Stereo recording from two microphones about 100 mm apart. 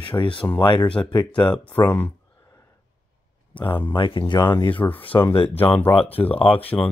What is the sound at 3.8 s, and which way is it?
Speech, 55° left (ahead or behind).